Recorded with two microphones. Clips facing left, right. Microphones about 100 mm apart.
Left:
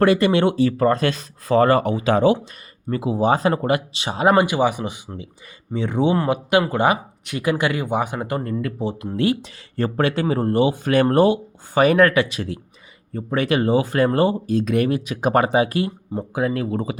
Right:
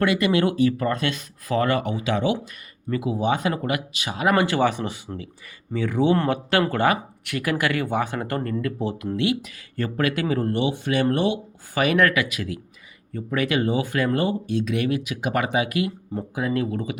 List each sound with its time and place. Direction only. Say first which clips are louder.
0.0 s speech: left 4 dB; 35° left (ahead or behind)
9.1 s speech: left 5 dB; 40° left (ahead or behind)